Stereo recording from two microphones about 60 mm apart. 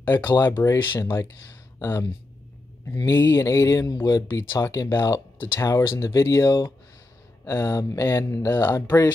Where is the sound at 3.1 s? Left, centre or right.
Left.